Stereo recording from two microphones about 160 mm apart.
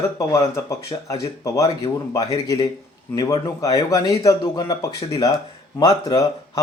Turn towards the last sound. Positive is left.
turn(degrees=25)  # may be behind; listen again after turning